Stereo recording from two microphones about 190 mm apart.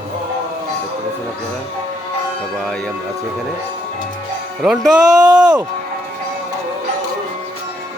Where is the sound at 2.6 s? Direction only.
Centre (ahead or behind).